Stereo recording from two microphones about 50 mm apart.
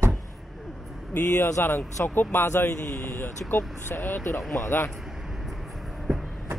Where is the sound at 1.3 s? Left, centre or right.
Left.